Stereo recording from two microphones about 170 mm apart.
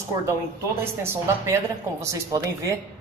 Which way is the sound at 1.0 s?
15° right (ahead or behind).